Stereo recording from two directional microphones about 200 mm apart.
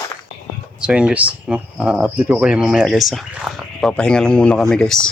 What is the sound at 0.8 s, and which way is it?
Speech, 5° right (ahead or behind).